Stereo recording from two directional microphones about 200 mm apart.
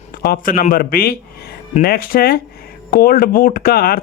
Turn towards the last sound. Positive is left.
turn(degrees=50)  # may be behind; listen again after turning